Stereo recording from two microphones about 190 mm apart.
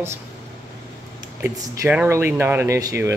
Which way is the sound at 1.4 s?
10° right (ahead or behind).